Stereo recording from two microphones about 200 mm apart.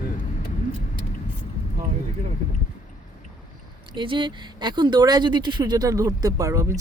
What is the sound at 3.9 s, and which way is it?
Speech, 25° right (ahead or behind).